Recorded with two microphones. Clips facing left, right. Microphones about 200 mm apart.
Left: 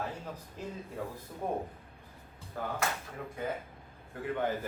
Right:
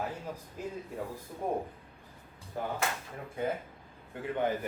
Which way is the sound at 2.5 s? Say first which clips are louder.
Right 2 dB; 20° right (ahead or behind).